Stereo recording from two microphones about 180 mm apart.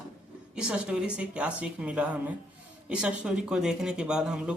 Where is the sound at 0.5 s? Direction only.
5° right (ahead or behind).